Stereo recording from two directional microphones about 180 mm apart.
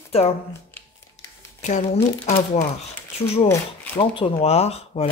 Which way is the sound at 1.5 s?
40° left (ahead or behind).